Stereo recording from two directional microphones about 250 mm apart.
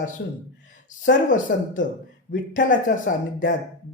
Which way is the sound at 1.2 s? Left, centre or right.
Left.